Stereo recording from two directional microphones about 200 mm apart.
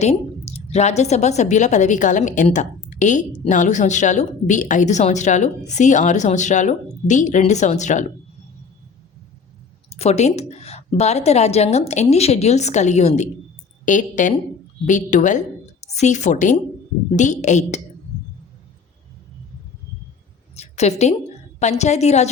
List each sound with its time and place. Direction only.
0.0 s a woman's voice: 35° left (ahead or behind)
9.9 s a woman's voice: 30° left (ahead or behind)
20.6 s a sound: 35° left (ahead or behind)
21.6 s a woman's voice: 35° left (ahead or behind)